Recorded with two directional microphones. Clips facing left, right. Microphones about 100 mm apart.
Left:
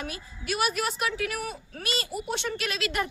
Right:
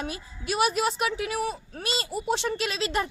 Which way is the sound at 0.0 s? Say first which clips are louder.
Right 3 dB; 25° right (ahead or behind).